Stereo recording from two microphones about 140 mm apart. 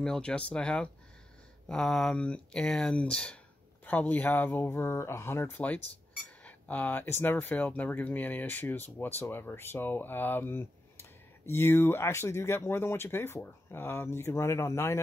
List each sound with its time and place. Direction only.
0.0 s speech: 5° left (ahead or behind)